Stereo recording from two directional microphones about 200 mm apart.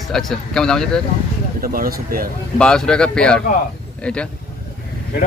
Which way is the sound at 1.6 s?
45° right (ahead or behind).